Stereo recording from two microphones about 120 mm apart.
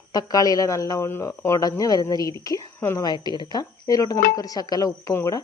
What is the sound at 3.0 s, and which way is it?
Speech, 35° left (ahead or behind).